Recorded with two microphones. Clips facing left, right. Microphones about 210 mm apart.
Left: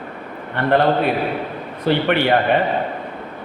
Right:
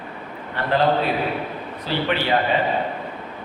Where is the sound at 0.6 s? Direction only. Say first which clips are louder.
Left 3 dB; 60° left (ahead or behind).